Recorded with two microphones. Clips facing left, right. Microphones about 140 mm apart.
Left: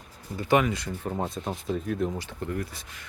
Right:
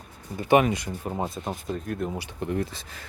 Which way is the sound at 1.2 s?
Centre (ahead or behind).